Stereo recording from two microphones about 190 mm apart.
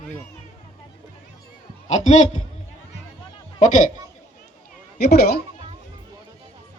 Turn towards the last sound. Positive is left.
turn(degrees=55)  # may be behind; listen again after turning